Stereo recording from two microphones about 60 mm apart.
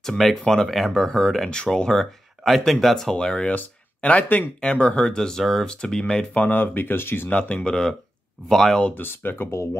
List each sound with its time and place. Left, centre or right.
0.4 s speech: centre
3.5 s speech: left
6.3 s speech: left
7.2 s speech: centre
8.9 s speech: left